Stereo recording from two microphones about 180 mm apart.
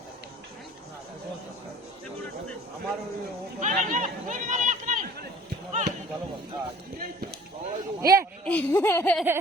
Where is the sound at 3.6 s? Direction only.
45° right (ahead or behind).